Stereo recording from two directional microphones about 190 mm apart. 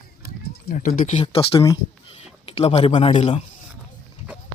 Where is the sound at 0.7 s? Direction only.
45° left (ahead or behind).